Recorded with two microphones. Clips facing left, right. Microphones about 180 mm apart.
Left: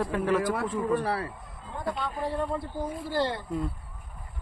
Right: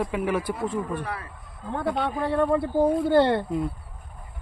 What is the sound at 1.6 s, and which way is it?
Speech, 65° right (ahead or behind).